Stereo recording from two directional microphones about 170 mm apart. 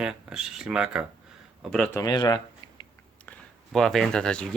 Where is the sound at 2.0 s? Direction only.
25° left (ahead or behind).